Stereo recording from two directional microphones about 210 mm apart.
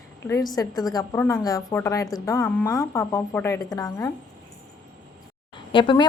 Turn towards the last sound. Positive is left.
turn(degrees=20)  # may be behind; listen again after turning